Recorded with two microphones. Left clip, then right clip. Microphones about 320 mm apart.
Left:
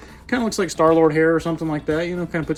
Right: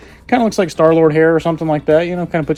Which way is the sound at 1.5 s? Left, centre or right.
Right.